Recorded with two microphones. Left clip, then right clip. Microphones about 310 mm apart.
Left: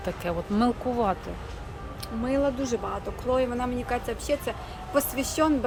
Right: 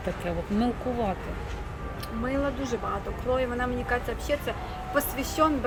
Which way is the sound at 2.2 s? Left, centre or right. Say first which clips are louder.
Left 3 dB; left.